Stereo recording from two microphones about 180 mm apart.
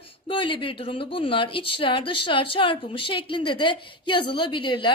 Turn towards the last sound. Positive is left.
turn(degrees=25)  # may be behind; listen again after turning